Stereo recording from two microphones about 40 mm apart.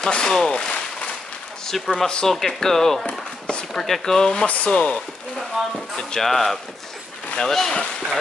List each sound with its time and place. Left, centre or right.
0.0 s speech: centre
4.5 s speech: left
6.2 s speech: centre